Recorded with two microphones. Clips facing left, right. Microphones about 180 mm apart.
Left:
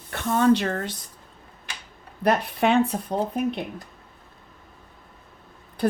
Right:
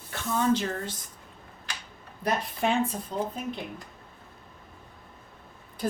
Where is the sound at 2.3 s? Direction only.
65° left (ahead or behind).